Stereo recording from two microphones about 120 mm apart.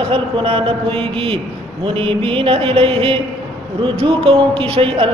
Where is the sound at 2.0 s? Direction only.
45° right (ahead or behind).